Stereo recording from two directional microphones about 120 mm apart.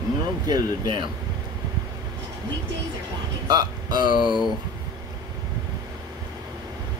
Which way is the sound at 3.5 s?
35° right (ahead or behind).